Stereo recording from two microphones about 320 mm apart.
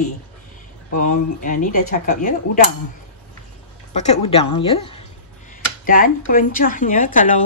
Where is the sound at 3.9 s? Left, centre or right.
Left.